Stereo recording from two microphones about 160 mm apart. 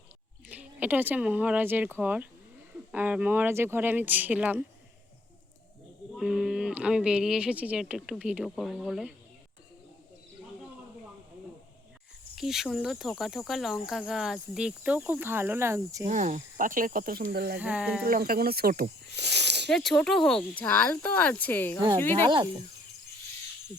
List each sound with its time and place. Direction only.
0.4 s speech: 10° right (ahead or behind)
6.1 s speech: 5° right (ahead or behind)
12.4 s speech: centre (ahead or behind); by 16.0 s 20° right (ahead or behind)
16.0 s speech: 50° right (ahead or behind); by 17.6 s 70° right (ahead or behind)
17.6 s speech: 10° right (ahead or behind)
18.0 s speech: 65° right (ahead or behind); by 19.7 s 90° right
19.7 s speech: centre (ahead or behind)